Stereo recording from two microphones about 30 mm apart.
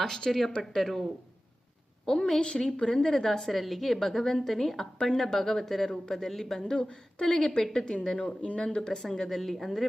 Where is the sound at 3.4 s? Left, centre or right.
Centre; by 7.8 s left.